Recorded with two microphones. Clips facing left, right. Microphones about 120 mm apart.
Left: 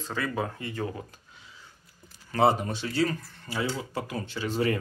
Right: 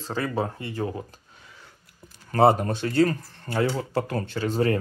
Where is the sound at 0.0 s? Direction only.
30° right (ahead or behind).